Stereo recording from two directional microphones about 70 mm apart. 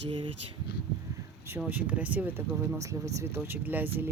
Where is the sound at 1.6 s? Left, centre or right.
Right.